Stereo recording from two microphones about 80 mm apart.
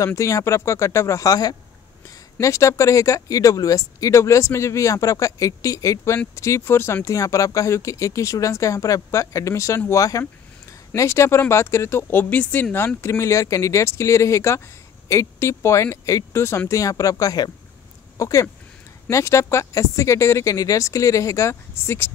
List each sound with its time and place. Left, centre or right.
0.0 s speech: left